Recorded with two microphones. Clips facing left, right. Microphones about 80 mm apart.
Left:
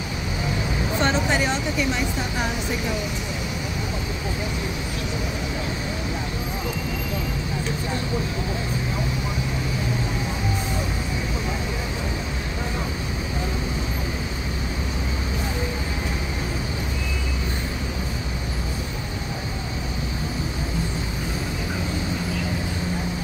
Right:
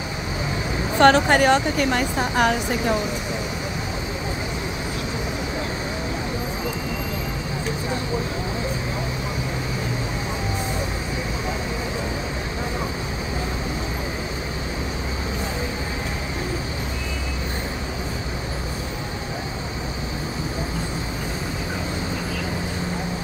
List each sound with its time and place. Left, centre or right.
0.9 s speech: right